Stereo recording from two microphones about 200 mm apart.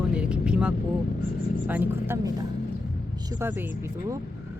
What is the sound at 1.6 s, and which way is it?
Speech, 10° right (ahead or behind).